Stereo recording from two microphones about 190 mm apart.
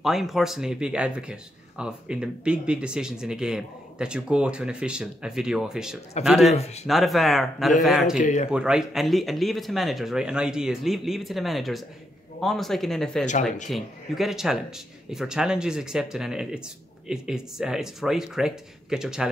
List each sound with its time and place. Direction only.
0.0 s speech: centre (ahead or behind)
6.5 s speech: 35° left (ahead or behind)
6.9 s speech: centre (ahead or behind)
8.2 s speech: 40° left (ahead or behind)
8.5 s speech: 5° right (ahead or behind)